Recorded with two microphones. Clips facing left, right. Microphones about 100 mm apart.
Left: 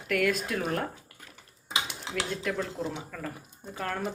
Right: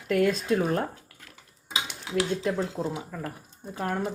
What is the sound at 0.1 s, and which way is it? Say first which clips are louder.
Speech: right 4 dB; 25° right (ahead or behind).